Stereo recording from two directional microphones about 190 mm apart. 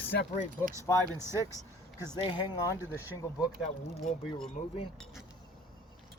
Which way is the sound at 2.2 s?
20° left (ahead or behind).